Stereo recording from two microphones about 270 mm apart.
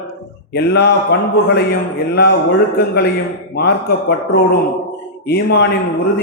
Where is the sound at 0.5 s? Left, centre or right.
Left.